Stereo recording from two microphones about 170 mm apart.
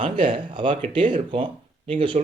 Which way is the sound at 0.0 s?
30° right (ahead or behind).